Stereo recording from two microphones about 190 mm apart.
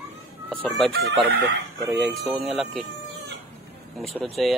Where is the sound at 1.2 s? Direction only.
60° right (ahead or behind).